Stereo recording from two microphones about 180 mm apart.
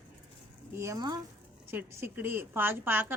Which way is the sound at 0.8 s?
20° right (ahead or behind).